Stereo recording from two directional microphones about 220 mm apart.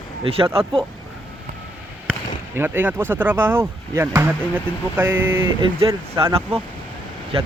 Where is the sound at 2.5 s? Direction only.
10° right (ahead or behind).